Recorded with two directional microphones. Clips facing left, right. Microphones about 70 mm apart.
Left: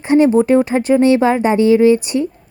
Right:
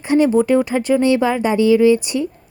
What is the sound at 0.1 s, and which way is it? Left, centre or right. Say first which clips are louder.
Speech: left 3 dB; left.